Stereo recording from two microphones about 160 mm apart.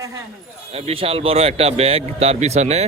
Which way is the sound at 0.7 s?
40° right (ahead or behind).